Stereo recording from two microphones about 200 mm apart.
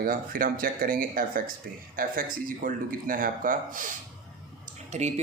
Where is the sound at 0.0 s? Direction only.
45° right (ahead or behind).